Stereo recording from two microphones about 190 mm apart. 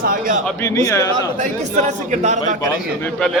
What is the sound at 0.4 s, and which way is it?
Speech, 15° left (ahead or behind).